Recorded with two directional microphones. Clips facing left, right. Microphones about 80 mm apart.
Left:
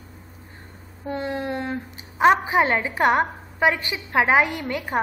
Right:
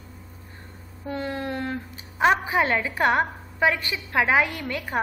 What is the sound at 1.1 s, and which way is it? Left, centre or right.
A woman's voice, centre.